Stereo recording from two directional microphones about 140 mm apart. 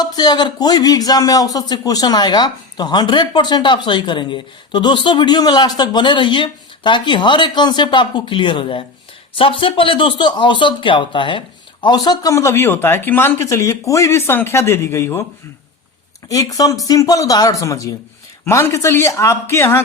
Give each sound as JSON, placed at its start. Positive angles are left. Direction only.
{"t": 0.0, "sound": "speech", "side_deg": 30}
{"t": 16.3, "sound": "speech", "side_deg": 25}